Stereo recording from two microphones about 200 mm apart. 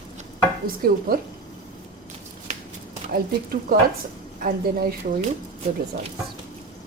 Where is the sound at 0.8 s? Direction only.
50° right (ahead or behind).